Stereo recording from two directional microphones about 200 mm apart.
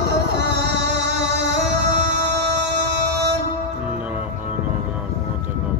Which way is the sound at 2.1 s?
60° right (ahead or behind).